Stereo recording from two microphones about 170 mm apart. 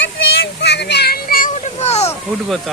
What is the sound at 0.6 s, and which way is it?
Speech, 85° left.